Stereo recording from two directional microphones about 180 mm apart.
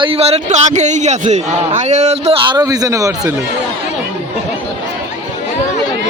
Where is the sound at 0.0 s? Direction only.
35° right (ahead or behind).